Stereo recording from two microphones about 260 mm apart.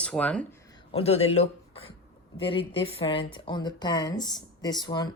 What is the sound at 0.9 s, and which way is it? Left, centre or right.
A man's voice, left.